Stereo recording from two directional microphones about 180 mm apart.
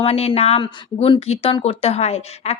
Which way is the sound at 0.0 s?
35° left (ahead or behind).